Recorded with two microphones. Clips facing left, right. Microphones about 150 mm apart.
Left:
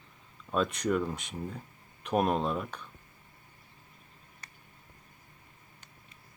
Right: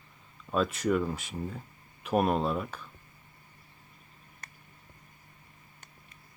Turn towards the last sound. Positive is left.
turn(degrees=-50)  # may be behind; listen again after turning